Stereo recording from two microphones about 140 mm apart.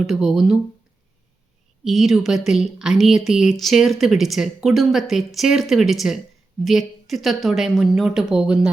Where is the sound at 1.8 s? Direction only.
Centre (ahead or behind).